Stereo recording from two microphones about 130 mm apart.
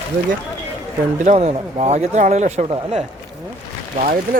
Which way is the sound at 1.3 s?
60° right (ahead or behind).